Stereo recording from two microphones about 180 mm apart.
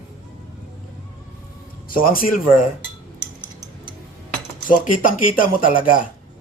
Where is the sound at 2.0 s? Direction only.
50° left (ahead or behind).